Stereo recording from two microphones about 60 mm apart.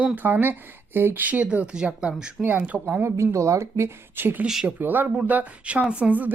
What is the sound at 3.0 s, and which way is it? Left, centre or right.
Speech, right.